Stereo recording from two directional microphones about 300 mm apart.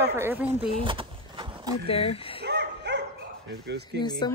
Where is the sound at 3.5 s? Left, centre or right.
Right.